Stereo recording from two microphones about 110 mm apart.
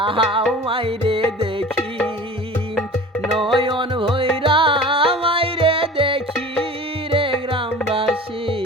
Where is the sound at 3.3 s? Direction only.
50° right (ahead or behind).